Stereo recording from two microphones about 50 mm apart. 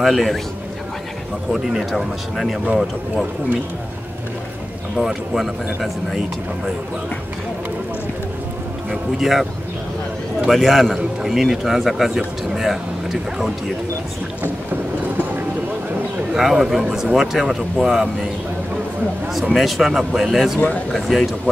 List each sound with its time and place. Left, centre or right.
0.0 s a man's voice: centre
1.5 s a man's voice: centre
2.6 s speech: centre
4.9 s a man's voice: centre
9.2 s a man's voice: centre
10.5 s a man's voice: centre
16.3 s a man's voice: centre
19.5 s a man's voice: centre
20.9 s a man's voice: centre